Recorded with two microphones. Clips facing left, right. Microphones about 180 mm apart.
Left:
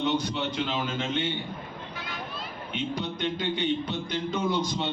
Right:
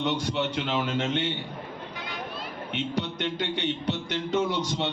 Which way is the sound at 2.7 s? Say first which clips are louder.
Right 1 dB; 70° right (ahead or behind).